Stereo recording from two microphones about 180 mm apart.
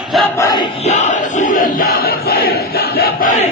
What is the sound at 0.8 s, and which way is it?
Crowd, 40° left (ahead or behind).